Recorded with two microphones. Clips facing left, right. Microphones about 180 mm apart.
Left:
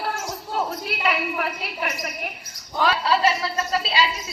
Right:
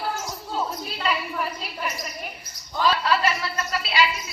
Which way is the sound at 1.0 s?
70° left (ahead or behind).